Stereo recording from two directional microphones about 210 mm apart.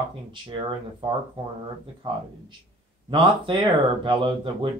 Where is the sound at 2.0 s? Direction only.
20° right (ahead or behind).